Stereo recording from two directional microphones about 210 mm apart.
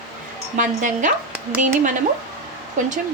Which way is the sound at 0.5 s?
35° right (ahead or behind).